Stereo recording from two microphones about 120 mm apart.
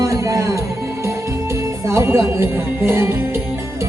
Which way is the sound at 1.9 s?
25° right (ahead or behind).